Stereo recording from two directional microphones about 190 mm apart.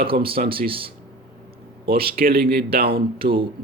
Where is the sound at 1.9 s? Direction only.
50° right (ahead or behind).